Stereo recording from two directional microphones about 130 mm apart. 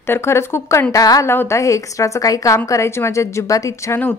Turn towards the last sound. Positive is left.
turn(degrees=25)  # may be behind; listen again after turning